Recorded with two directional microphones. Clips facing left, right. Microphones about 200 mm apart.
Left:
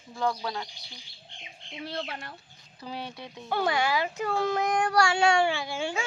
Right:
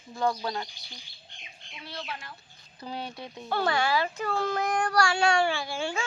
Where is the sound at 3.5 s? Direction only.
15° left (ahead or behind).